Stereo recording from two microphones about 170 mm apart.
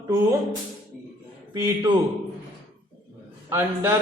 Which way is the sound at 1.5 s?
20° right (ahead or behind).